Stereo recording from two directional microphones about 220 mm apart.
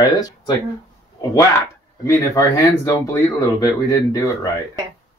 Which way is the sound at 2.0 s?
15° left (ahead or behind).